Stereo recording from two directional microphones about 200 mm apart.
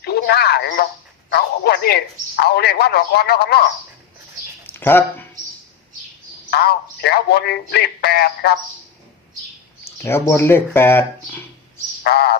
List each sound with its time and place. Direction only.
0.0 s a man's voice: 55° left (ahead or behind)
4.6 s speech: 10° left (ahead or behind)
6.5 s a man's voice: 55° left (ahead or behind)
10.0 s speech: 15° left (ahead or behind)
12.0 s a man's voice: 55° left (ahead or behind)